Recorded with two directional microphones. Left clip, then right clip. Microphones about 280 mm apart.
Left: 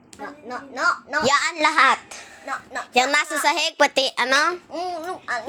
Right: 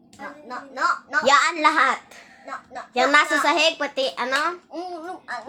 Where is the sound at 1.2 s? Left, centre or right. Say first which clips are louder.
Right 2 dB; centre.